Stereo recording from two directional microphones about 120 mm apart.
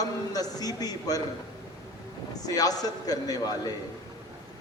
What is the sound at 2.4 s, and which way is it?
A man's voice, 30° left (ahead or behind).